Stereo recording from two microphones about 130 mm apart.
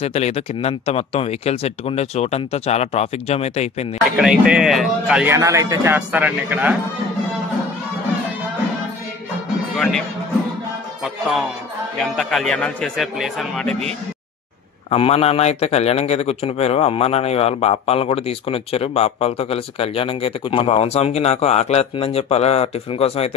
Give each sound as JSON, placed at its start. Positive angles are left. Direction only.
{"t": 0.0, "sound": "a man's voice", "side_deg": 50}
{"t": 4.2, "sound": "a man's voice", "side_deg": -5}
{"t": 5.3, "sound": "speech", "side_deg": -25}
{"t": 12.0, "sound": "a man's voice", "side_deg": 0}
{"t": 14.9, "sound": "a man's voice", "side_deg": 50}